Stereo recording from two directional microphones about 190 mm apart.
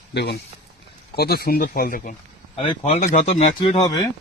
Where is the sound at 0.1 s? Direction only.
60° left (ahead or behind).